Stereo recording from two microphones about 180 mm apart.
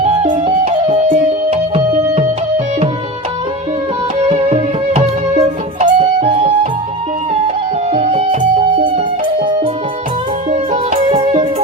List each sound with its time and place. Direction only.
0.0 s music: 35° right (ahead or behind)
4.3 s music: 35° right (ahead or behind)
7.9 s music: 35° right (ahead or behind)
10.5 s music: 35° right (ahead or behind)